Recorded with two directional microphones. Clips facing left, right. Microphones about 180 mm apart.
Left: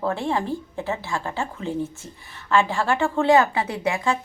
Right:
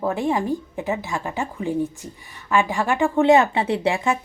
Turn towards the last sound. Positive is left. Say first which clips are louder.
# right 3 dB
turn(degrees=-25)  # may be behind; listen again after turning